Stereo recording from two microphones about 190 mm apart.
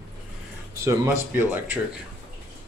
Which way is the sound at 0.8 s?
15° right (ahead or behind).